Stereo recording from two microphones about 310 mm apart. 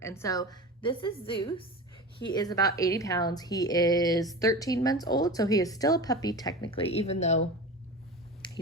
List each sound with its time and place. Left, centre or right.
0.0 s speech: centre